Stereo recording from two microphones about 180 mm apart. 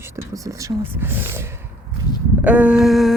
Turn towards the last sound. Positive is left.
turn(degrees=0)  # may be behind; listen again after turning